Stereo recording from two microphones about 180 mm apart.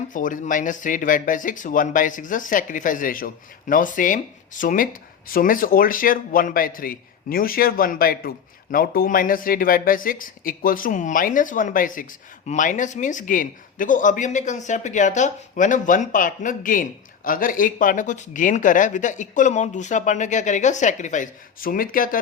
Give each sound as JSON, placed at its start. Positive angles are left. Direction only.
{"t": 0.1, "sound": "speech", "side_deg": 45}